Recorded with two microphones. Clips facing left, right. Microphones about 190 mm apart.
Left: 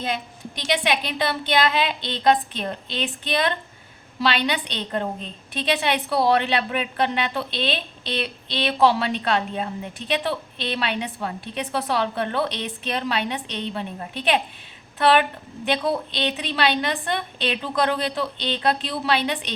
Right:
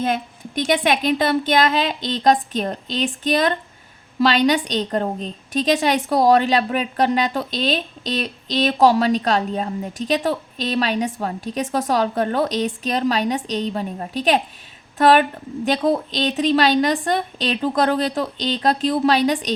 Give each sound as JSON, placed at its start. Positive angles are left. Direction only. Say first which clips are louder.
{"t": 0.0, "sound": "a woman's voice", "louder": "right 6 dB", "side_deg": -45}